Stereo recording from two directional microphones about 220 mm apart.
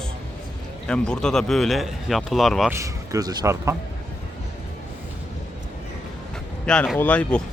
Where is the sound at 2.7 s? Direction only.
15° right (ahead or behind).